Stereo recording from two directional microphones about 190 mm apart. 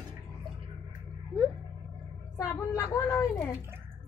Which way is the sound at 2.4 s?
15° left (ahead or behind).